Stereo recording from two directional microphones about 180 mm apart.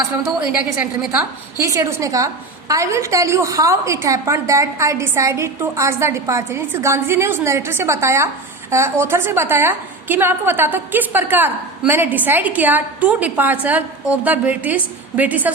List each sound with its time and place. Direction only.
0.4 s a woman's voice: 10° right (ahead or behind)